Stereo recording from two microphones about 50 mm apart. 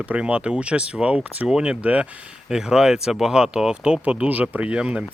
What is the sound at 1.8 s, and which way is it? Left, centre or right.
Speech, right.